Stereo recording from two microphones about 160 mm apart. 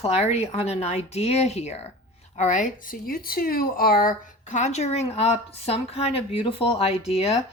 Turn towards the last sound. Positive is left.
turn(degrees=40)  # may be behind; listen again after turning